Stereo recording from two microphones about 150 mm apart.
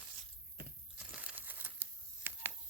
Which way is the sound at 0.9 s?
10° right (ahead or behind).